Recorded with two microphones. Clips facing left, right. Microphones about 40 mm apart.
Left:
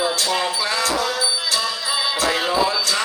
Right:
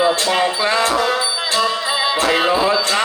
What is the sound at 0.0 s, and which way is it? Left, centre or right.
Music, right.